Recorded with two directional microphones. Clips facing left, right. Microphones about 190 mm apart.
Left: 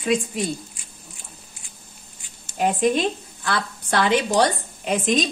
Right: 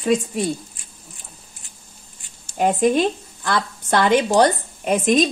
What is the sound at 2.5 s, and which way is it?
A woman's voice, 50° right (ahead or behind).